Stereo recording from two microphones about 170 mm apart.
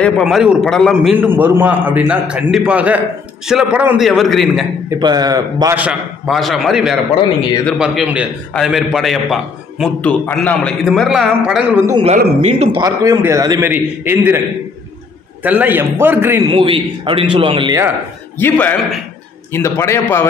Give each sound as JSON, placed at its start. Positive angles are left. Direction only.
{"t": 0.0, "sound": "a man's voice", "side_deg": 0}
{"t": 4.8, "sound": "a man's voice", "side_deg": -25}
{"t": 5.8, "sound": "a man's voice", "side_deg": -5}
{"t": 12.4, "sound": "a man's voice", "side_deg": -40}
{"t": 12.8, "sound": "a man's voice", "side_deg": -20}
{"t": 15.4, "sound": "a man's voice", "side_deg": -10}
{"t": 16.4, "sound": "a man's voice", "side_deg": -30}
{"t": 18.4, "sound": "a man's voice", "side_deg": 10}